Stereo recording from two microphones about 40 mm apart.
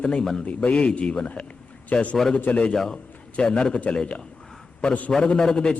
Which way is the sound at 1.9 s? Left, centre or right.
Left.